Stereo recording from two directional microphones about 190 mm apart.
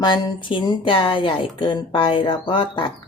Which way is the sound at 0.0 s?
25° left (ahead or behind).